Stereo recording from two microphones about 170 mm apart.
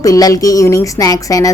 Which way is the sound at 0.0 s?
20° left (ahead or behind).